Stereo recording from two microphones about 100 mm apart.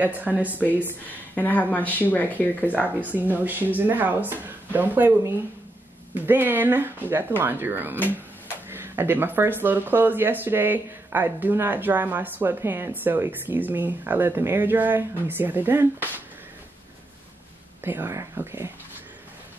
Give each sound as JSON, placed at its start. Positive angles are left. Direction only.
{"t": 0.0, "sound": "speech", "side_deg": -15}
{"t": 1.3, "sound": "speech", "side_deg": 15}
{"t": 2.8, "sound": "speech", "side_deg": -15}
{"t": 17.8, "sound": "speech", "side_deg": -20}